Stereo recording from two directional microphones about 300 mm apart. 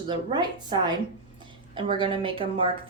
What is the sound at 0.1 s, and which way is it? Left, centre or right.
A woman's voice, centre.